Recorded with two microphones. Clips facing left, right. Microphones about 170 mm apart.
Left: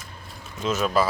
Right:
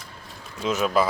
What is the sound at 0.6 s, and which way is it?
Speech, 15° right (ahead or behind).